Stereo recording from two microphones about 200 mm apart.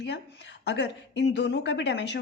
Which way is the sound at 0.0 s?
60° left (ahead or behind).